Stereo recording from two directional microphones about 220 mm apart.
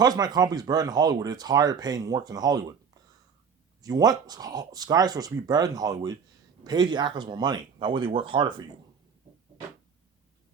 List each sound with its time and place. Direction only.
0.0 s speech: 20° right (ahead or behind)